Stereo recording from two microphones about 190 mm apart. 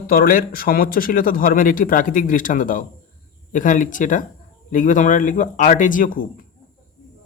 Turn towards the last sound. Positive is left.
turn(degrees=45)  # may be behind; listen again after turning